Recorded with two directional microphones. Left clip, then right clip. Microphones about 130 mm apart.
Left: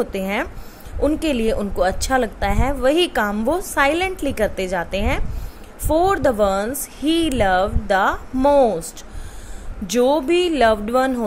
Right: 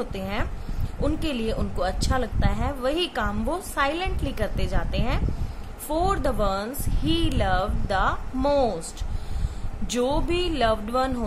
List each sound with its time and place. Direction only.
0.0 s speech: 45° left (ahead or behind)
9.8 s speech: 40° left (ahead or behind)